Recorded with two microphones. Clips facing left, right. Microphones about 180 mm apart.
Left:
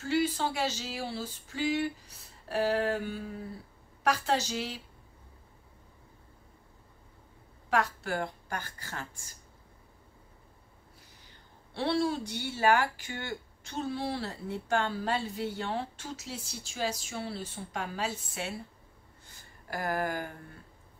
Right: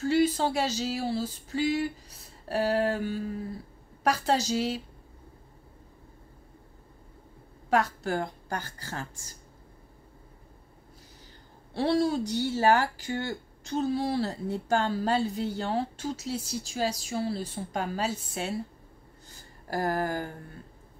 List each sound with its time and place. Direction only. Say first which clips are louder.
0.0 s speech: right 5 dB; 40° right (ahead or behind)
7.7 s speech: right 4 dB; 35° right (ahead or behind)
11.7 s speech: right 4 dB; 40° right (ahead or behind)
19.7 s speech: right 4 dB; 35° right (ahead or behind)